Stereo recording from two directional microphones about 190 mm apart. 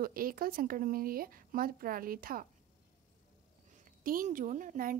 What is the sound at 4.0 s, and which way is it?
Speech, 45° right (ahead or behind).